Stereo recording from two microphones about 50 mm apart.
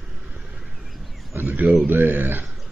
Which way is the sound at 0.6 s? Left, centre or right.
Centre.